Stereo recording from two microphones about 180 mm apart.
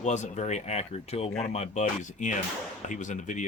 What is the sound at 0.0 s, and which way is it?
Speech, 40° left (ahead or behind).